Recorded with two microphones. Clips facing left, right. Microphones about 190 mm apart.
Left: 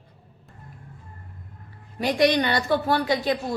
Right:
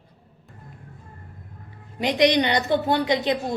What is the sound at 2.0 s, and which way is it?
A woman's voice, 20° right (ahead or behind).